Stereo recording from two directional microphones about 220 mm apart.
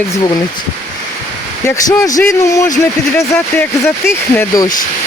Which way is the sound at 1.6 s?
15° left (ahead or behind).